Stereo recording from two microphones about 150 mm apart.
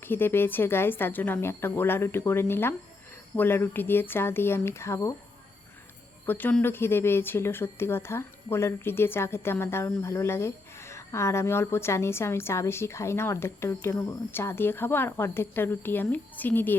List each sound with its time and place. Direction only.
0.0 s speech: 15° left (ahead or behind)
6.2 s speech: 10° left (ahead or behind)